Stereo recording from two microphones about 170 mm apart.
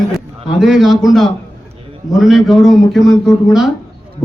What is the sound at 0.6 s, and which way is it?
A man's voice, centre (ahead or behind).